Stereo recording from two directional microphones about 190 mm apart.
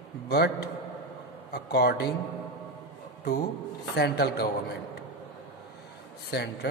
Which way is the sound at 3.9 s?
60° left (ahead or behind).